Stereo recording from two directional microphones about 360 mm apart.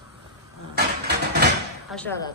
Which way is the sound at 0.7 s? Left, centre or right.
Right.